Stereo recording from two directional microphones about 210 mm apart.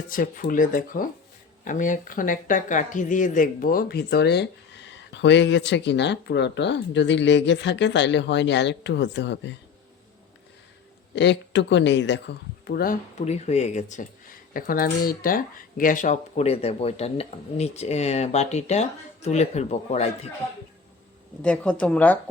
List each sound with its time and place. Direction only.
0.1 s speech: 40° left (ahead or behind); by 9.6 s 55° left (ahead or behind)
11.1 s speech: 55° left (ahead or behind); by 20.1 s 30° left (ahead or behind)
21.4 s a woman's voice: 5° left (ahead or behind)